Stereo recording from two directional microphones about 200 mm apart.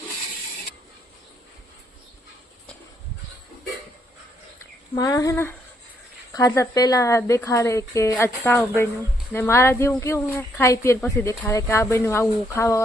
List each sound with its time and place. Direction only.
4.9 s speech: 15° left (ahead or behind)